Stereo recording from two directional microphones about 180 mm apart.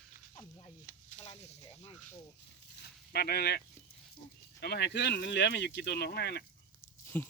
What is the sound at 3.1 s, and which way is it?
Speech, 60° left (ahead or behind).